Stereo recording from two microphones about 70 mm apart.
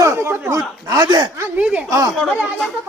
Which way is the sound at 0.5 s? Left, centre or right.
Right.